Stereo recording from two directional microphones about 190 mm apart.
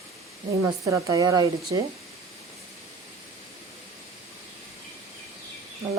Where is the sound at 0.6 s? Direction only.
15° right (ahead or behind).